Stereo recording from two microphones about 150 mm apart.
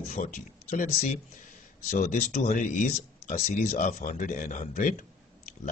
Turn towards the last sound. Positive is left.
turn(degrees=60)  # may be behind; listen again after turning